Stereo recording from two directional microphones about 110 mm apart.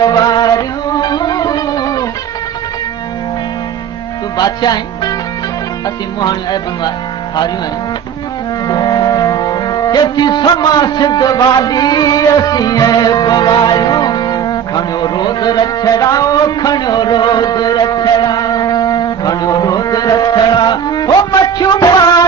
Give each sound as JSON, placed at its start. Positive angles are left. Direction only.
{"t": 0.0, "sound": "music", "side_deg": 40}
{"t": 4.4, "sound": "music", "side_deg": 35}
{"t": 8.6, "sound": "music", "side_deg": 35}